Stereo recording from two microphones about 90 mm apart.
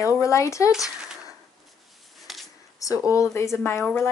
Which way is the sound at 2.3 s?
Centre (ahead or behind).